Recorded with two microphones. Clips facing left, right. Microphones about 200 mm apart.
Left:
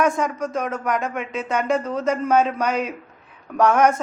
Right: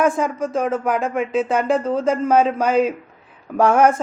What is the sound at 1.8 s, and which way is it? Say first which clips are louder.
Speech: right 4 dB; 30° right (ahead or behind).